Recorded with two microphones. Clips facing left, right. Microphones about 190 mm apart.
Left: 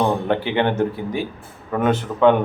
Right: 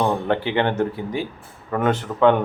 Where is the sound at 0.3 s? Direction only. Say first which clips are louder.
Left 1 dB; 15° left (ahead or behind).